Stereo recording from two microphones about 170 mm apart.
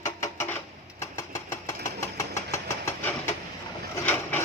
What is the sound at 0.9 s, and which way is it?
Engine, 15° left (ahead or behind).